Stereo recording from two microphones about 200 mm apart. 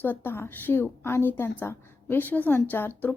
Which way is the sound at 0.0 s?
10° left (ahead or behind).